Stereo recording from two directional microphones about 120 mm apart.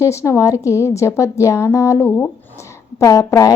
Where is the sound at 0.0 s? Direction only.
25° left (ahead or behind).